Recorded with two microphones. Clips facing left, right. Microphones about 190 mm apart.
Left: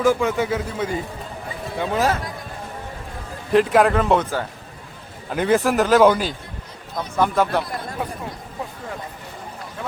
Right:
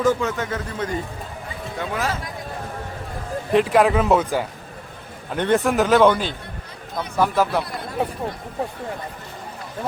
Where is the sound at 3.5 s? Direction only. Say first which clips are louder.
Left 1 dB; centre (ahead or behind).